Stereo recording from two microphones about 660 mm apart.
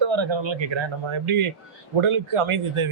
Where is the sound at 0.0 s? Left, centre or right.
Right.